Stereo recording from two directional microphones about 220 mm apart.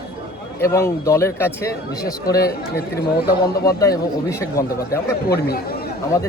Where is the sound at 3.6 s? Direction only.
15° left (ahead or behind).